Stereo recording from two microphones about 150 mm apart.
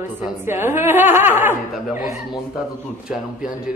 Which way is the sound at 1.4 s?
60° left (ahead or behind).